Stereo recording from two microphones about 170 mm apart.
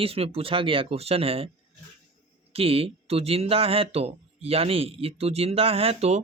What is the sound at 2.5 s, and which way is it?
Speech, 35° right (ahead or behind).